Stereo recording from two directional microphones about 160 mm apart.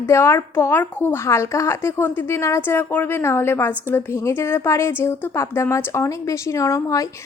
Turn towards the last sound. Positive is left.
turn(degrees=20)  # may be behind; listen again after turning